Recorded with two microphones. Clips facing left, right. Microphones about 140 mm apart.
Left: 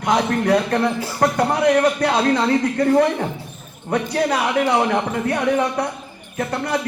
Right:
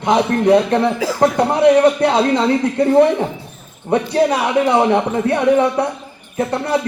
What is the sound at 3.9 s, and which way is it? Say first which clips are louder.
A man's voice: right 5 dB; 25° right (ahead or behind).